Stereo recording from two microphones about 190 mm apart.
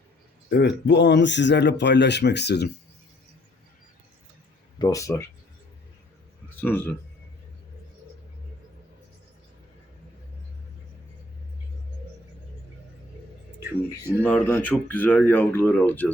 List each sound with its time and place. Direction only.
0.5 s speech: 65° left (ahead or behind)
4.8 s speech: 15° left (ahead or behind)
6.5 s a man's voice: 10° left (ahead or behind)
13.6 s speech: 15° right (ahead or behind)
14.2 s speech: 10° left (ahead or behind)